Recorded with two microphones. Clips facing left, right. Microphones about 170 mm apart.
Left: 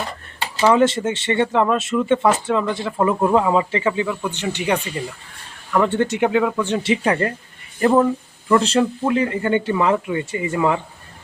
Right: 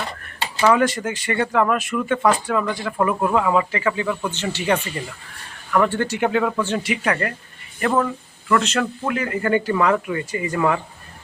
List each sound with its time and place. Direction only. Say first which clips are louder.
0.6 s speech: left 2 dB; 25° left (ahead or behind)
5.8 s speech: left 4 dB; 20° left (ahead or behind)
6.9 s speech: left 7 dB; 30° left (ahead or behind)
8.4 s a man's voice: left 4 dB; 30° left (ahead or behind)